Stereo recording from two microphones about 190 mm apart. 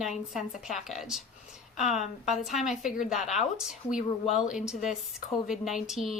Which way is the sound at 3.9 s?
40° left (ahead or behind).